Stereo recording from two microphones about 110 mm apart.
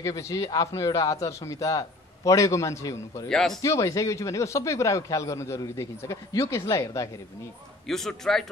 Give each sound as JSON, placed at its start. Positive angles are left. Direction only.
{"t": 0.0, "sound": "speech", "side_deg": 30}
{"t": 3.3, "sound": "a man's voice", "side_deg": 5}
{"t": 3.6, "sound": "speech", "side_deg": 30}
{"t": 7.8, "sound": "a man's voice", "side_deg": 5}